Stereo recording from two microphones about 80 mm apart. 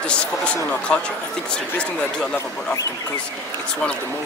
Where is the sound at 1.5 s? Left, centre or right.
Centre.